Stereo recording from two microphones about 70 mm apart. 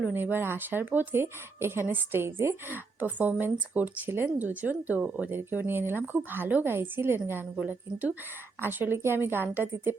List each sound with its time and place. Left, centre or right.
0.0 s a woman's voice: right
8.6 s a woman's voice: right